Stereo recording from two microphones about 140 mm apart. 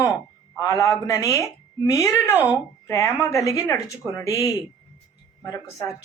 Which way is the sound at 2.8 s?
20° left (ahead or behind).